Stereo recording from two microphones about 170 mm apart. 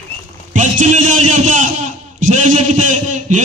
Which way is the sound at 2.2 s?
50° right (ahead or behind).